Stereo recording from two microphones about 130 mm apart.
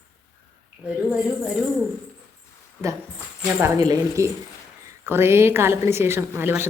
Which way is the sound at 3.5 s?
20° right (ahead or behind).